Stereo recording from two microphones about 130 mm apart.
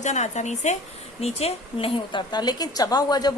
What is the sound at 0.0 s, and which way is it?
Speech, 60° left (ahead or behind).